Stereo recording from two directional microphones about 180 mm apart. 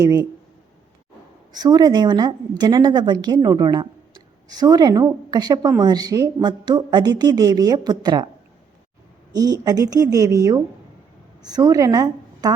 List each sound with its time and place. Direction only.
0.0 s a woman's voice: 20° right (ahead or behind)
1.5 s a woman's voice: 25° right (ahead or behind)
9.3 s a woman's voice: 20° right (ahead or behind)